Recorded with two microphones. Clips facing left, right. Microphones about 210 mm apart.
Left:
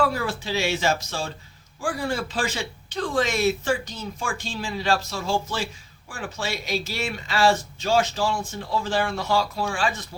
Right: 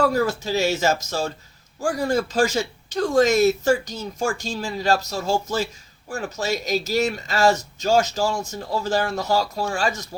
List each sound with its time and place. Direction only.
0.0 s speech: 40° right (ahead or behind)